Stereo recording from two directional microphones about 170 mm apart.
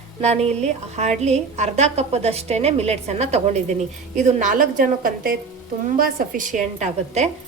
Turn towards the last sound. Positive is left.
turn(degrees=-45)  # may be behind; listen again after turning